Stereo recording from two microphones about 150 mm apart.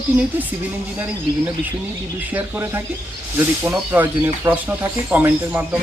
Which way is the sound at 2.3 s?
20° right (ahead or behind).